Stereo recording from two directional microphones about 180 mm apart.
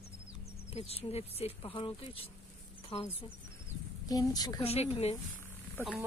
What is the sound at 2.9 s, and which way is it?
Speech, 30° left (ahead or behind).